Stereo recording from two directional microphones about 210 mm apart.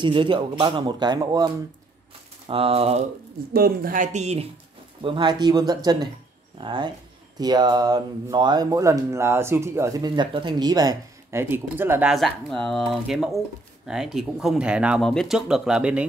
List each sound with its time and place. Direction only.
0.0 s speech: 25° right (ahead or behind)
3.5 s speech: 45° right (ahead or behind); by 16.1 s 5° right (ahead or behind)